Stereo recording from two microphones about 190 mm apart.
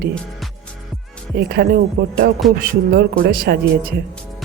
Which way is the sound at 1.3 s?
55° right (ahead or behind).